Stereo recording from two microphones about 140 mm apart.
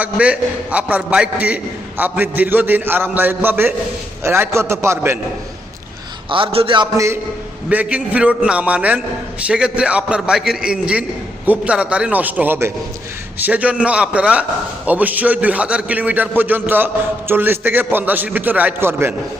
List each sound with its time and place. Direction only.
0.0 s a man's voice: 10° right (ahead or behind)
6.3 s a man's voice: 40° right (ahead or behind)
6.9 s a man's voice: 20° right (ahead or behind)
7.7 s a man's voice: 10° right (ahead or behind)